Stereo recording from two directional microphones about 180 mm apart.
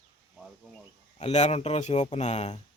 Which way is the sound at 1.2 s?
35° left (ahead or behind).